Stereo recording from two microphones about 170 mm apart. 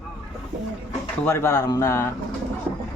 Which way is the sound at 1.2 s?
15° left (ahead or behind).